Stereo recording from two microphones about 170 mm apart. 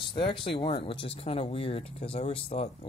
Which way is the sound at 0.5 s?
30° left (ahead or behind).